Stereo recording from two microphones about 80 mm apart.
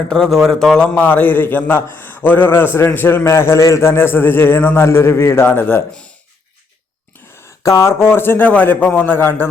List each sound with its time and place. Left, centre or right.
0.1 s speech: centre
0.9 s a man's voice: left
7.4 s a man's voice: left